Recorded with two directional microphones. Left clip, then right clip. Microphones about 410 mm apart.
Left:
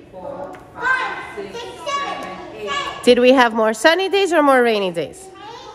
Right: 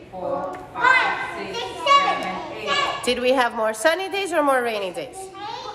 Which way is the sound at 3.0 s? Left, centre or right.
Left.